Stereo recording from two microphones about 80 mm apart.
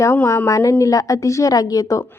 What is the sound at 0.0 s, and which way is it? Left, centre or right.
Speech, left.